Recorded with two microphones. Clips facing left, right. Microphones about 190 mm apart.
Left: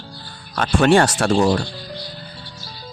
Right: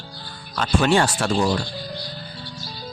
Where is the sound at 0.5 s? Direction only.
55° left (ahead or behind).